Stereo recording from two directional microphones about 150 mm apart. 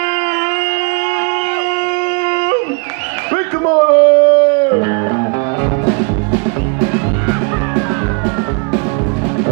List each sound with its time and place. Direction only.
2.2 s dog: 20° left (ahead or behind)
3.3 s music: 20° left (ahead or behind)